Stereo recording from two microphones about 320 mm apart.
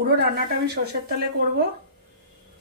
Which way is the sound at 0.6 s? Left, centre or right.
Right.